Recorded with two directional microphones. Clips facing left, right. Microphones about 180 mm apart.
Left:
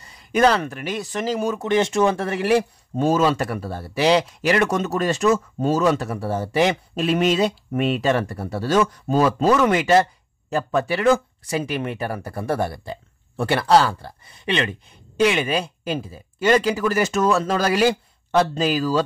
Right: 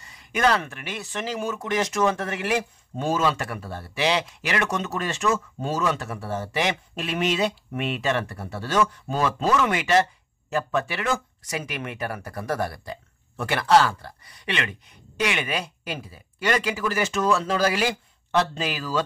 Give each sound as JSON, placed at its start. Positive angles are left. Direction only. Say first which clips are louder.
{"t": 0.0, "sound": "speech", "louder": "left 5 dB", "side_deg": 35}